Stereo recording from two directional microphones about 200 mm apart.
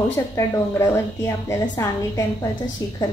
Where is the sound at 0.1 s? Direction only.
15° left (ahead or behind).